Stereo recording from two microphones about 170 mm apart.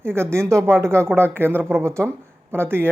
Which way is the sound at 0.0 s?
15° right (ahead or behind).